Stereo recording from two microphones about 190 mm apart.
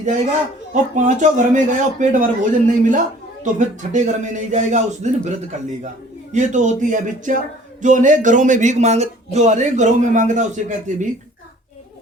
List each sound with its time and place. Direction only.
0.7 s a man's voice: 40° right (ahead or behind)